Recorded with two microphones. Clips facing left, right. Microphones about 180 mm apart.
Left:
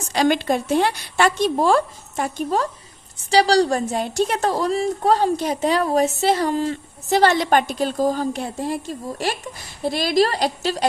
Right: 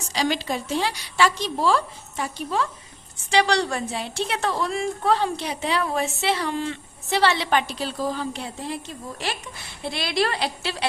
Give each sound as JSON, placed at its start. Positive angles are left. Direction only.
{"t": 0.1, "sound": "a woman's voice", "side_deg": 55}